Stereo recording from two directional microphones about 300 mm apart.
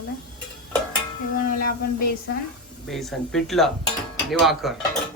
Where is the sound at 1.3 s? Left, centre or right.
Left.